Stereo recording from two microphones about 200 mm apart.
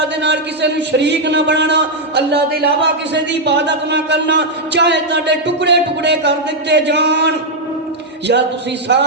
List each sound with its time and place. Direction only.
0.0 s a man's voice: 60° right (ahead or behind)
8.9 s a man's voice: 60° right (ahead or behind)